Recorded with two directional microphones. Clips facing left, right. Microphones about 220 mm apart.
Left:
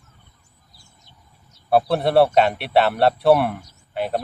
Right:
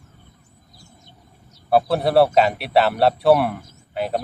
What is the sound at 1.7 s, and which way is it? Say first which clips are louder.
Speech: even; centre (ahead or behind).